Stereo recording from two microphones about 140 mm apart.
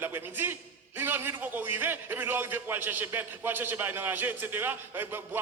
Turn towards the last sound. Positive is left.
turn(degrees=-15)  # may be behind; listen again after turning